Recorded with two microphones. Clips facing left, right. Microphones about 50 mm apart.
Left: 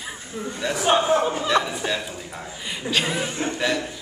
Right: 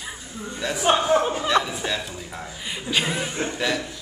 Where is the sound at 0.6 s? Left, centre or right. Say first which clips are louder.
Left 1 dB; centre.